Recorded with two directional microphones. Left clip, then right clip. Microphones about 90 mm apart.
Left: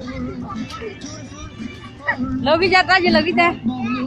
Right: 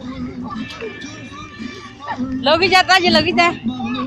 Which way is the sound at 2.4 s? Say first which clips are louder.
Right 2 dB; centre (ahead or behind).